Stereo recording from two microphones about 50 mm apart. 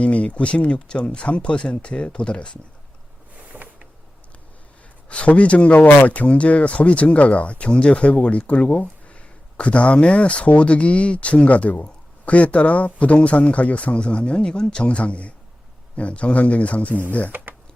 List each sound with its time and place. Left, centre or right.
0.0 s speech: left
3.5 s a sound: right
5.0 s speech: left